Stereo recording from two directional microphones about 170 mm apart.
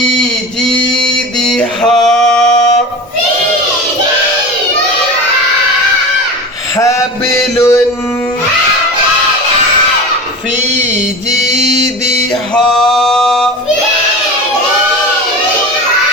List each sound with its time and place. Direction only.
1.0 s a sound: 5° left (ahead or behind)
2.0 s male singing: 5° left (ahead or behind)
7.5 s music: 15° left (ahead or behind)
12.6 s music: 5° left (ahead or behind)